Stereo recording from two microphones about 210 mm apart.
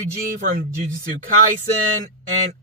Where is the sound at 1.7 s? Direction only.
90° right.